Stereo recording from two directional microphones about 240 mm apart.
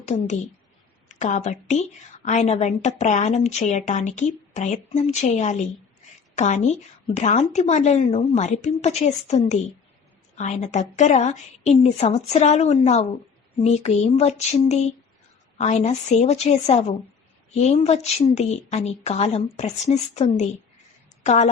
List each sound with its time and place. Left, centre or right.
0.0 s a woman's voice: left